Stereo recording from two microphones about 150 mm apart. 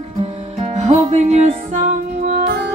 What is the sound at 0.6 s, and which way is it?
Music, 45° right (ahead or behind).